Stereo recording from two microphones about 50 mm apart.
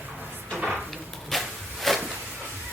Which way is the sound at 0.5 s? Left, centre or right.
Centre.